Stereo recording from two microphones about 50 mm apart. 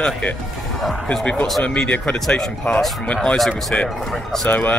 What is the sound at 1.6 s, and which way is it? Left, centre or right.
Speech, left.